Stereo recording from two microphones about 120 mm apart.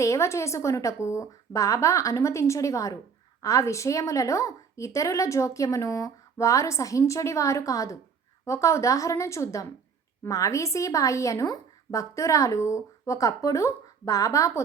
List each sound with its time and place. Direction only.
0.0 s a woman's voice: 25° left (ahead or behind)